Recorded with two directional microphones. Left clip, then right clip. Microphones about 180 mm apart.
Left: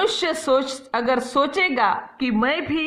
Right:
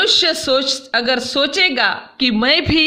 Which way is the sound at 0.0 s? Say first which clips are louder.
Right 7 dB; 5° left (ahead or behind).